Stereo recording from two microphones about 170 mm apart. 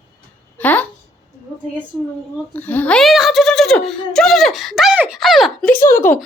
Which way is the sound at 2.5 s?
10° left (ahead or behind).